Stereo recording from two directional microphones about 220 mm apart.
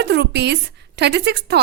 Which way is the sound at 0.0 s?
50° right (ahead or behind).